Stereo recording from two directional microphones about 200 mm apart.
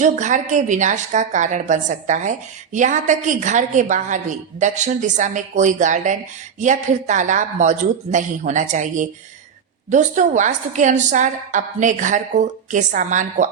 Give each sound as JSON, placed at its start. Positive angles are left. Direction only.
{"t": 0.0, "sound": "a woman's voice", "side_deg": -35}